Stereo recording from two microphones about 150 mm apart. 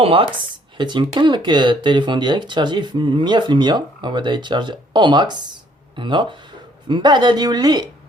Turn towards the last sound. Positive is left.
turn(degrees=-30)  # may be behind; listen again after turning